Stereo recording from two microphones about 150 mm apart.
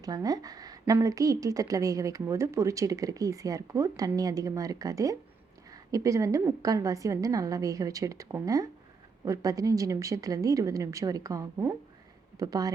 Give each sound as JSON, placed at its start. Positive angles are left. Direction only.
{"t": 0.0, "sound": "speech", "side_deg": -25}